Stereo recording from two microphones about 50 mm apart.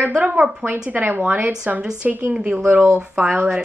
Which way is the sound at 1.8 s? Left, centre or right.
Centre.